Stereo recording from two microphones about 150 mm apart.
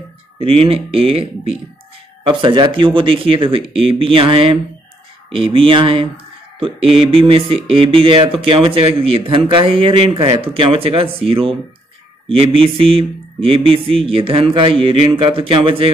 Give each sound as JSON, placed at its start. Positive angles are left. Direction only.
{"t": 0.4, "sound": "speech", "side_deg": -40}